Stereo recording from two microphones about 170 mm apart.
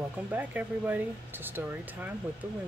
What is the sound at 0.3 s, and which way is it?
Speech, 10° right (ahead or behind).